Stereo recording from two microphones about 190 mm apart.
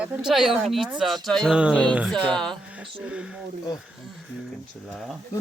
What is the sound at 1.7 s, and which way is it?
Speech, 5° left (ahead or behind).